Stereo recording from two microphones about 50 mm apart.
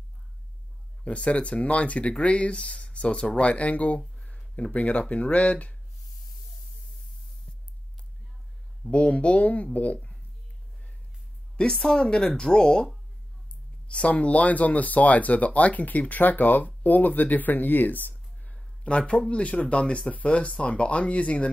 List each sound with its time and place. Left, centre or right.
1.0 s speech: left
4.2 s a sound: centre
5.0 s speech: left
7.5 s music: centre
8.9 s speech: left
11.5 s speech: centre
13.8 s speech: left